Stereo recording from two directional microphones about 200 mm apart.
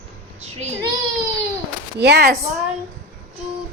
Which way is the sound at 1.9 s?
55° right (ahead or behind).